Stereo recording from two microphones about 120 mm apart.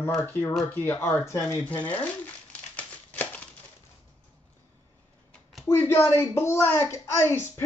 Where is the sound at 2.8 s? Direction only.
10° left (ahead or behind).